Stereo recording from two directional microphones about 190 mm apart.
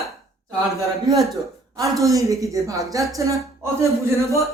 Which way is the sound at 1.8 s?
15° right (ahead or behind).